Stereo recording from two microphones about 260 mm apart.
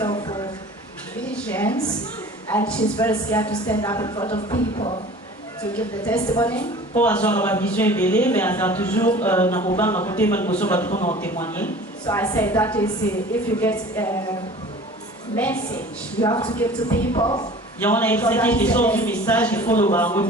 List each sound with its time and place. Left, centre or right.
0.0 s a sound: centre
1.2 s a sound: centre
2.5 s a man's voice: centre
5.8 s a man's voice: centre
10.9 s speech: left
11.1 s speech: centre
15.3 s a man's voice: centre
16.2 s speech: centre
17.8 s speech: centre